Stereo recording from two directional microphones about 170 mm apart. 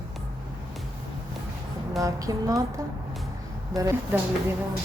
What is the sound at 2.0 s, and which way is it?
A woman's voice, 20° right (ahead or behind).